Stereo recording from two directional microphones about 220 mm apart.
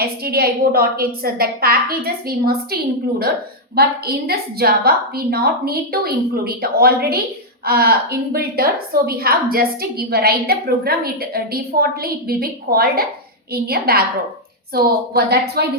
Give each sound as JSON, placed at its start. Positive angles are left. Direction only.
{"t": 0.0, "sound": "a woman's voice", "side_deg": -45}
{"t": 3.8, "sound": "a woman's voice", "side_deg": -45}